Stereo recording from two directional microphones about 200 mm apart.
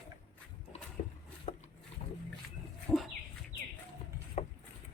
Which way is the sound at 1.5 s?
35° left (ahead or behind).